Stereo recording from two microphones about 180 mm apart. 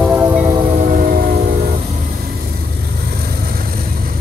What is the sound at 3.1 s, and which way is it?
Vehicle, 55° right (ahead or behind).